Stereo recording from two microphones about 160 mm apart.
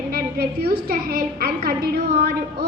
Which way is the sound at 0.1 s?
70° right (ahead or behind).